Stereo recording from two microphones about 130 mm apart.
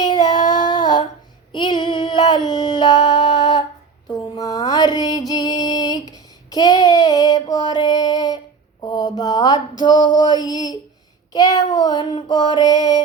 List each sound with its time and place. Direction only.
0.0 s child singing: 35° left (ahead or behind)
1.5 s female singing: 35° left (ahead or behind)
4.4 s a sound: 25° left (ahead or behind)
10.2 s child singing: 35° left (ahead or behind)